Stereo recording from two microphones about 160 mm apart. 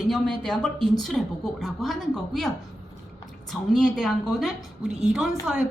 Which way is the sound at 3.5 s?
5° left (ahead or behind).